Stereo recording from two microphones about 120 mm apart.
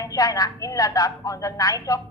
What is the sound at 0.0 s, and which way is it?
A woman's voice, 30° left (ahead or behind).